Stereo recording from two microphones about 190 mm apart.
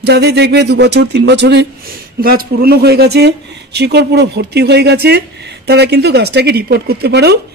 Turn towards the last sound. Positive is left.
turn(degrees=-60)  # may be behind; listen again after turning